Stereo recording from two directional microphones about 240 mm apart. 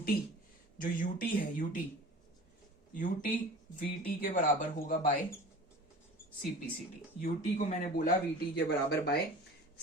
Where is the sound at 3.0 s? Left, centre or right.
Left.